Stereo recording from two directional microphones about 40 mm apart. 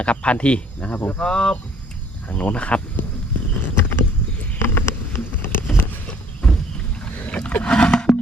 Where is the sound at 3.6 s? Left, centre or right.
Left.